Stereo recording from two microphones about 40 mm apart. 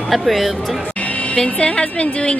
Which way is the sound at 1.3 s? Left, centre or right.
Left.